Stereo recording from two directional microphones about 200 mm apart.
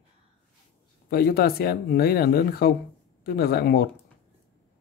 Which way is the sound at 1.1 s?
50° left (ahead or behind).